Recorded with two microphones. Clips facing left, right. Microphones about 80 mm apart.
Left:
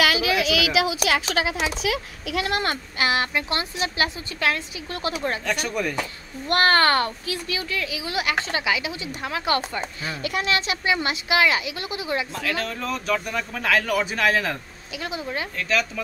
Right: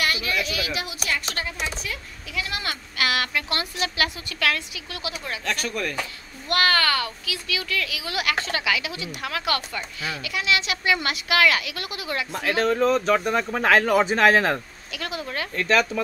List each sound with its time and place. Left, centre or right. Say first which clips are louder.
0.0 s speech: left 5 dB; left
3.0 s a woman's voice: left 1 dB; left
5.0 s a child's voice: left 6 dB; left
5.5 s speech: right 2 dB; centre
6.5 s a child's voice: left 3 dB; left
7.7 s a woman's voice: left 1 dB; left
10.7 s a woman's voice: even; left
12.4 s speech: right 6 dB; right
15.0 s speech: left 1 dB; centre
15.5 s speech: right 5 dB; right